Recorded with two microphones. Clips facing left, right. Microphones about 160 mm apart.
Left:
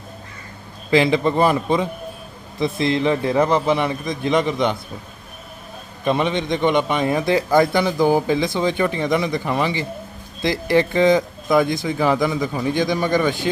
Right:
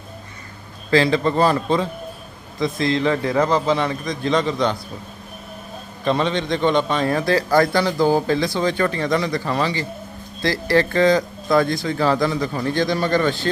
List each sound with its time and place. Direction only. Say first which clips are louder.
0.9 s speech: left 1 dB; 20° left (ahead or behind)
2.6 s a man's voice: left 1 dB; 25° left (ahead or behind)
6.1 s speech: even; 15° left (ahead or behind)